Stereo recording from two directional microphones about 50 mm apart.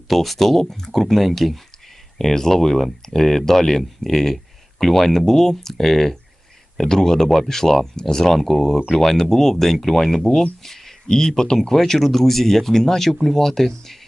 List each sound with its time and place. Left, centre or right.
0.1 s speech: centre
0.6 s speech: centre